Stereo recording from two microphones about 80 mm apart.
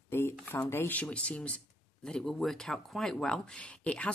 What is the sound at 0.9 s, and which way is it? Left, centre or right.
Speech, centre.